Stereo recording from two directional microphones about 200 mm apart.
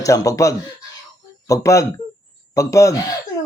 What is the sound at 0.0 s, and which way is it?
Speech, 15° left (ahead or behind).